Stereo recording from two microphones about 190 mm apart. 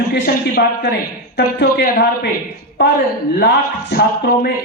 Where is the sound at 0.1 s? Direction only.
55° left (ahead or behind).